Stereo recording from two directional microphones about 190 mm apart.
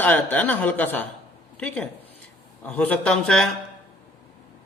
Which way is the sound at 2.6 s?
5° left (ahead or behind).